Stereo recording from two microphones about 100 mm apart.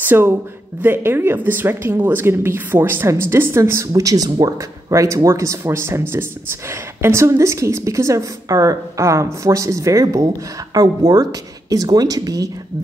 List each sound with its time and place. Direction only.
0.0 s a woman's voice: 20° right (ahead or behind); by 12.4 s 40° right (ahead or behind)